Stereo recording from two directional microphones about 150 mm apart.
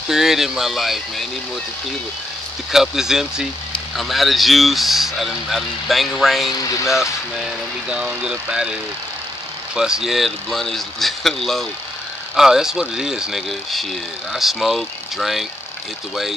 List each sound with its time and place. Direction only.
0.1 s speech: centre (ahead or behind)
2.7 s speech: 5° right (ahead or behind)
6.6 s speech: 20° left (ahead or behind)
7.3 s speech: 5° right (ahead or behind)
9.8 s speech: 5° right (ahead or behind)